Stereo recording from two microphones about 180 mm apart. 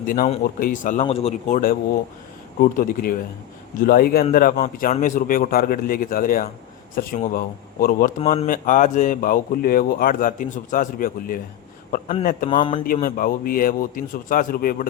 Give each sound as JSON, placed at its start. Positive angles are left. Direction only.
{"t": 0.4, "sound": "speech", "side_deg": 50}
{"t": 1.0, "sound": "a man's voice", "side_deg": 35}
{"t": 2.6, "sound": "speech", "side_deg": 50}
{"t": 8.2, "sound": "a man's voice", "side_deg": 35}
{"t": 8.4, "sound": "a man's voice", "side_deg": 45}
{"t": 12.5, "sound": "speech", "side_deg": 30}
{"t": 12.8, "sound": "speech", "side_deg": 50}